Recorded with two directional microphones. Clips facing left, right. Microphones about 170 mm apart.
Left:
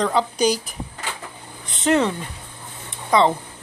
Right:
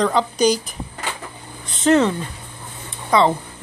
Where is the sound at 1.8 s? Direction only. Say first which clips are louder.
Right 3 dB; 15° left (ahead or behind).